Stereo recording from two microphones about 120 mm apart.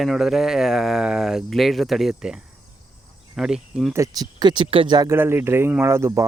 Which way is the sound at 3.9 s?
30° right (ahead or behind).